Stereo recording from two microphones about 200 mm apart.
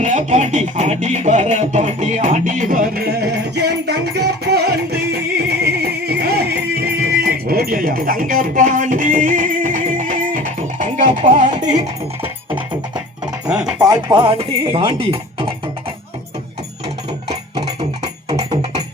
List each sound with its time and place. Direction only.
0.0 s music: 35° right (ahead or behind)
13.8 s speech: 20° right (ahead or behind)
17.5 s music: 30° right (ahead or behind)